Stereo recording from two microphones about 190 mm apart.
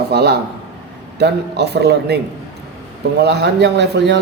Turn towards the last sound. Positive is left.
turn(degrees=-65)  # may be behind; listen again after turning